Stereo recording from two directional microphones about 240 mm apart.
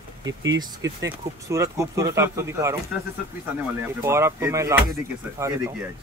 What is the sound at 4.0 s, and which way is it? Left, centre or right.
Speech, centre.